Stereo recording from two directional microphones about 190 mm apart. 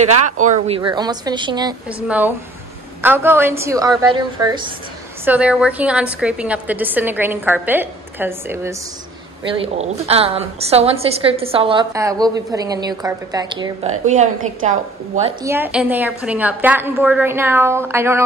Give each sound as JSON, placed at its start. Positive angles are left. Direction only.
{"t": 0.0, "sound": "a woman's voice", "side_deg": -35}
{"t": 0.7, "sound": "a woman's voice", "side_deg": -25}
{"t": 2.0, "sound": "a woman's voice", "side_deg": -10}
{"t": 5.2, "sound": "a woman's voice", "side_deg": -5}
{"t": 9.5, "sound": "a woman's voice", "side_deg": -30}
{"t": 11.9, "sound": "a woman's voice", "side_deg": -15}
{"t": 13.8, "sound": "a woman's voice", "side_deg": -40}
{"t": 15.4, "sound": "a woman's voice", "side_deg": -10}